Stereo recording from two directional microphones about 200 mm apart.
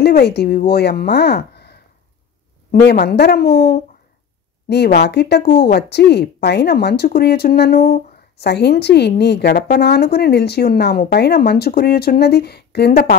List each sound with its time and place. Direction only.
0.0 s a woman's voice: 55° left (ahead or behind)